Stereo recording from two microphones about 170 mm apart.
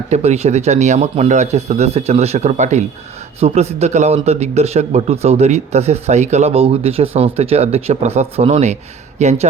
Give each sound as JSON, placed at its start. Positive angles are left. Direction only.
{"t": 0.1, "sound": "speech", "side_deg": -40}